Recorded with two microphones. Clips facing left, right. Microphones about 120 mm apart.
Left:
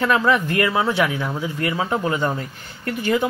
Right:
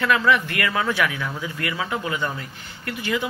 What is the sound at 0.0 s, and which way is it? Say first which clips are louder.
Speech: left 2 dB; 35° left (ahead or behind).